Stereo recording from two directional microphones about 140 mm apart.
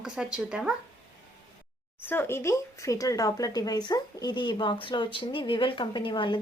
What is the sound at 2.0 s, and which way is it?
Speech, 15° left (ahead or behind).